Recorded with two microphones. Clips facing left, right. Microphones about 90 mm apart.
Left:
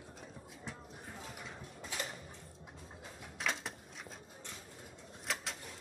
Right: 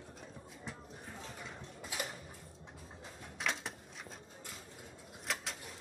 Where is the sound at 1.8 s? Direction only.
10° right (ahead or behind).